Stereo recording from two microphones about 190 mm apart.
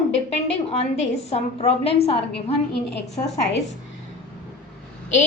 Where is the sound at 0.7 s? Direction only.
35° left (ahead or behind).